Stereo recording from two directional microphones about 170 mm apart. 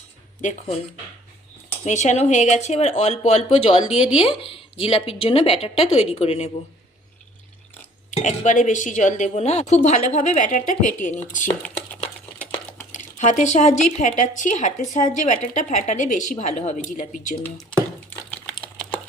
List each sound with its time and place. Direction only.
1.8 s speech: 45° left (ahead or behind)
4.0 s speech: 5° right (ahead or behind)
4.5 s speech: 35° left (ahead or behind)
8.1 s speech: 45° left (ahead or behind)
12.8 s speech: 50° left (ahead or behind)